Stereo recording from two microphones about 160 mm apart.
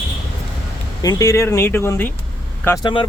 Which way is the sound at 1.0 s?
20° left (ahead or behind).